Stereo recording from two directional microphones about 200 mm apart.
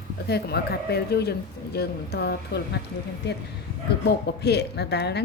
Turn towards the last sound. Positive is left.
turn(degrees=55)  # may be behind; listen again after turning